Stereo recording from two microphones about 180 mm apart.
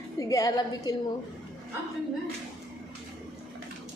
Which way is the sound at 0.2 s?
20° left (ahead or behind).